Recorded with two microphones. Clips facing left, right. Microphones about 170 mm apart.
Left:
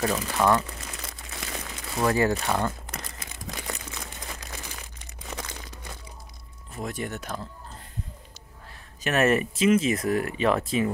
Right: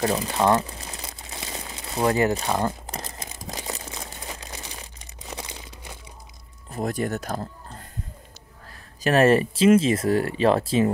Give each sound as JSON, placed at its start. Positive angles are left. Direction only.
{"t": 0.0, "sound": "crumpling", "side_deg": -30}
{"t": 2.6, "sound": "crumpling", "side_deg": -30}
{"t": 6.7, "sound": "speech", "side_deg": -40}
{"t": 9.0, "sound": "speech", "side_deg": -30}